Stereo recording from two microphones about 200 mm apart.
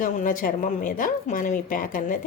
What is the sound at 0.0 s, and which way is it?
Speech, 40° left (ahead or behind).